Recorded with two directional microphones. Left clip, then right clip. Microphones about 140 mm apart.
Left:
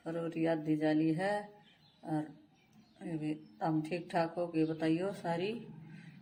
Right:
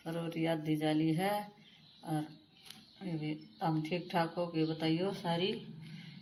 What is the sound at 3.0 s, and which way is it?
Speech, 10° left (ahead or behind).